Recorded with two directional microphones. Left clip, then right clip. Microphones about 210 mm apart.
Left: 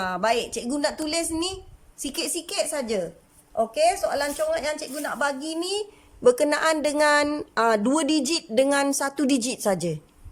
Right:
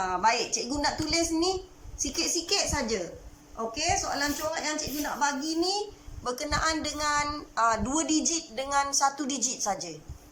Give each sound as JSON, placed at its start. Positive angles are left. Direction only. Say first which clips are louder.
{"t": 0.0, "sound": "a woman's voice", "louder": "left 2 dB", "side_deg": 55}